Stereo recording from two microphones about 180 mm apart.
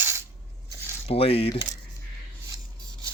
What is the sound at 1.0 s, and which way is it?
Speech, 35° left (ahead or behind).